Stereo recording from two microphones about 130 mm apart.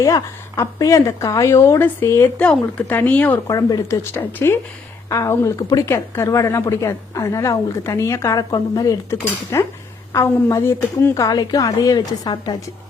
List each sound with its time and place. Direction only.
0.0 s a woman's voice: 25° left (ahead or behind)
3.4 s a woman's voice: 25° left (ahead or behind)